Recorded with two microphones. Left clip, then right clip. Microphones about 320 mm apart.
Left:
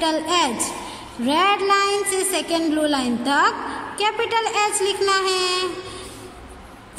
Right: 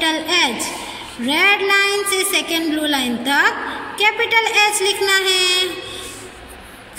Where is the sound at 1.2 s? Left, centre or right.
Left.